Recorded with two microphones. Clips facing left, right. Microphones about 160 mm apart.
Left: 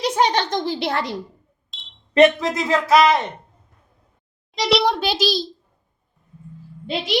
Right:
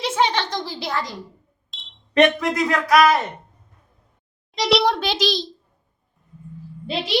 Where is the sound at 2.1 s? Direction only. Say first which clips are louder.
Left 2 dB; 25° left (ahead or behind).